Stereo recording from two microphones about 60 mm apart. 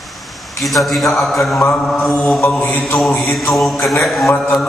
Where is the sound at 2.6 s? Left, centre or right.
Left.